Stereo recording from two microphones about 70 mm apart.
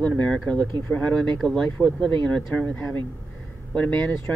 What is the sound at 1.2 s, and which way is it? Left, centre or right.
Speech, centre.